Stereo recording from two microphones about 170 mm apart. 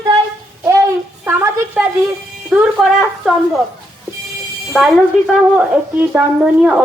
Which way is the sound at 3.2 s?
Centre (ahead or behind).